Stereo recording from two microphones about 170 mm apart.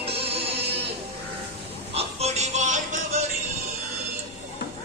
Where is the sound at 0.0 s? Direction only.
35° right (ahead or behind).